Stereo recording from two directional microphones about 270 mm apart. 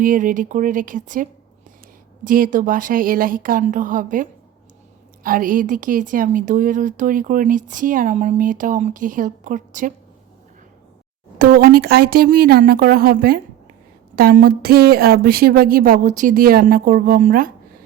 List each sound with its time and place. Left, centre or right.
0.0 s a woman's voice: right
11.3 s a woman's voice: right